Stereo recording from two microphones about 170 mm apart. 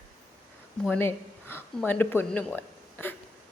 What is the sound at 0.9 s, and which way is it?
A woman's voice, 10° left (ahead or behind).